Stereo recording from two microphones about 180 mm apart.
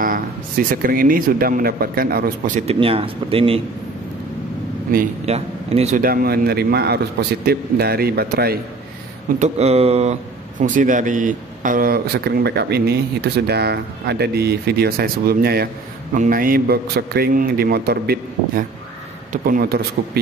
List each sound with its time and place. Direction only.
0.0 s speech: 50° right (ahead or behind); by 3.6 s 30° right (ahead or behind)
5.2 s a man's voice: 35° right (ahead or behind)
5.9 s speech: 55° right (ahead or behind)
9.4 s speech: 35° right (ahead or behind)
10.6 s speech: 45° right (ahead or behind)